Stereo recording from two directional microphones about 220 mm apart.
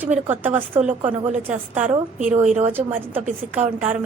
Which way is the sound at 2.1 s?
35° right (ahead or behind).